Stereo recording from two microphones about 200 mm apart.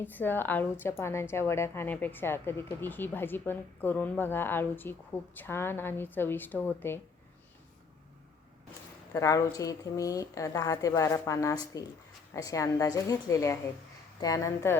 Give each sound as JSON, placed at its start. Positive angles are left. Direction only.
{"t": 0.0, "sound": "a woman's voice", "side_deg": 10}
{"t": 9.1, "sound": "a woman's voice", "side_deg": 15}